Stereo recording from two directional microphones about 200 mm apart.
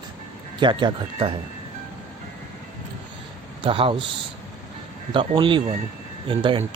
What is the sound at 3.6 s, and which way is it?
Speech, 25° right (ahead or behind).